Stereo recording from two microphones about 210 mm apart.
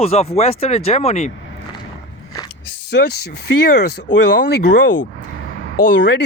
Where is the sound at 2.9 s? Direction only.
50° left (ahead or behind).